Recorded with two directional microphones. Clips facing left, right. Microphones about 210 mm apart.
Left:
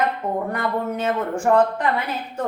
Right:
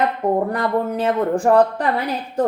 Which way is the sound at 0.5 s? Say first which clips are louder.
Right 4 dB; 35° right (ahead or behind).